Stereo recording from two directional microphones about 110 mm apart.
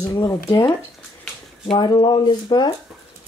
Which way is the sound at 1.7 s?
45° left (ahead or behind).